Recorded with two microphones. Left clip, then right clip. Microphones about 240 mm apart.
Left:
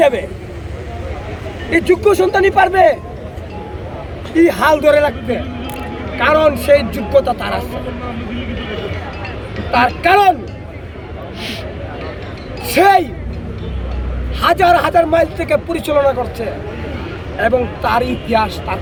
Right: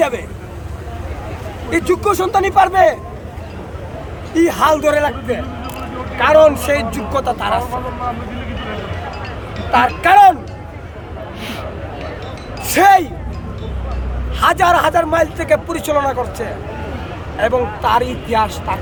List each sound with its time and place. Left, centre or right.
0.0 s speech: centre
1.7 s speech: centre
4.4 s speech: centre
9.7 s speech: centre
12.6 s speech: centre
14.3 s speech: centre